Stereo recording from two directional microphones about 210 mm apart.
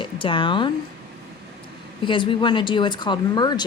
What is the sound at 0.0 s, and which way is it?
Speech, 25° left (ahead or behind).